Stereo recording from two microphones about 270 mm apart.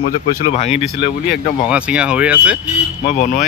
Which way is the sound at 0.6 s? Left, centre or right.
Left.